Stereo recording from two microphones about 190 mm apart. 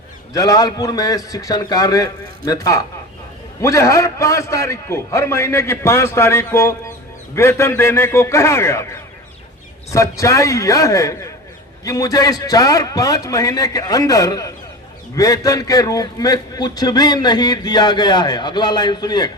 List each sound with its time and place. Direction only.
0.3 s a man's voice: 20° left (ahead or behind)